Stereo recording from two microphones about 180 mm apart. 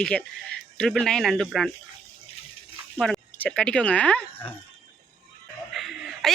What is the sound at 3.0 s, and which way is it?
Speech, 5° left (ahead or behind).